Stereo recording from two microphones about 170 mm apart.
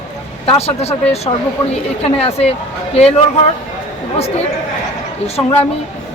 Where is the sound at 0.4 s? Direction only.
35° left (ahead or behind).